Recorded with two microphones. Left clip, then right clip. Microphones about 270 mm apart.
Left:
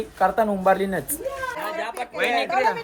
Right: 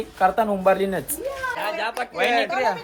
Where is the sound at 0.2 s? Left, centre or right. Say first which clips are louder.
Right 1 dB; centre.